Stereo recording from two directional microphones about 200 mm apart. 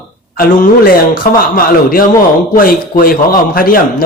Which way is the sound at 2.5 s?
45° left (ahead or behind).